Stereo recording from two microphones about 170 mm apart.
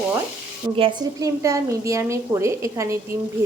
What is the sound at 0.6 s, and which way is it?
A woman's voice, 25° right (ahead or behind).